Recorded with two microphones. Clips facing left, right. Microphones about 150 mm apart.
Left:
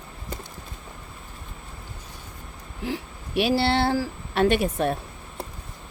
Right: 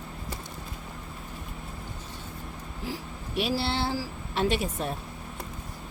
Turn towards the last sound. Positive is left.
turn(degrees=65)  # may be behind; listen again after turning